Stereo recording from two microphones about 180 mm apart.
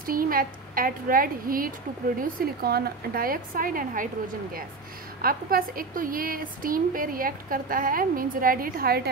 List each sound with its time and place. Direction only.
0.0 s a woman's voice: 50° right (ahead or behind)
5.2 s a woman's voice: 55° right (ahead or behind)